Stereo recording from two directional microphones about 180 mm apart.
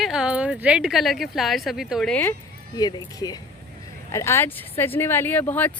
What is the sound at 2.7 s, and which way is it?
Speech, 20° left (ahead or behind).